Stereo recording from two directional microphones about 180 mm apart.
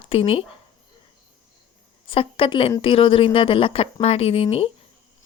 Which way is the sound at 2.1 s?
30° left (ahead or behind).